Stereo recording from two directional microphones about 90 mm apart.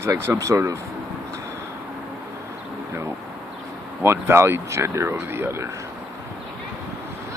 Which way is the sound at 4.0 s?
30° right (ahead or behind).